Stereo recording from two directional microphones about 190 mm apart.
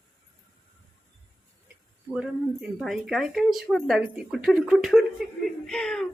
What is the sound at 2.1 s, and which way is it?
Speech, 5° right (ahead or behind).